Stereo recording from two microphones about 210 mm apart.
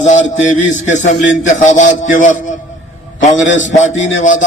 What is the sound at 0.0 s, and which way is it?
A man's voice, 35° left (ahead or behind).